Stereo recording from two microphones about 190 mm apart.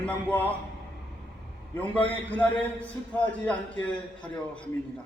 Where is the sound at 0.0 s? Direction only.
10° left (ahead or behind).